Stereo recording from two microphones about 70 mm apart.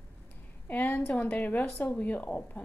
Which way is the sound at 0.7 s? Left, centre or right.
Left.